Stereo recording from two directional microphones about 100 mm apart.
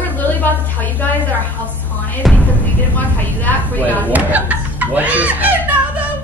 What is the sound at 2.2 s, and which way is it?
Speech, centre (ahead or behind).